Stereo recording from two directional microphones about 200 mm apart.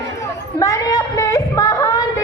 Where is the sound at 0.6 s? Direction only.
15° left (ahead or behind).